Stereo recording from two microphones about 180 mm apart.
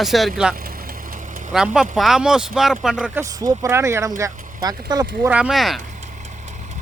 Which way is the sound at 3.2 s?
15° right (ahead or behind).